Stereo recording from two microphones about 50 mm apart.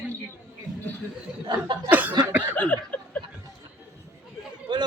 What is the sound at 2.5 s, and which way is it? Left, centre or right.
Chuckle, left.